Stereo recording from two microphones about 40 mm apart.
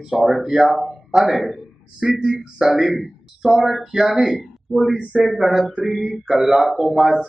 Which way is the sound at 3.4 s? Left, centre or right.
Centre.